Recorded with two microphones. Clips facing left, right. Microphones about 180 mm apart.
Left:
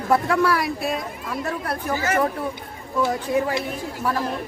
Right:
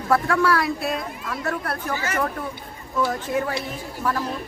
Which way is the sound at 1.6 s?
15° left (ahead or behind).